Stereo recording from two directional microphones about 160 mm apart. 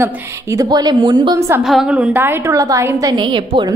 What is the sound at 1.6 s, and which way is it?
A woman's voice, 5° right (ahead or behind).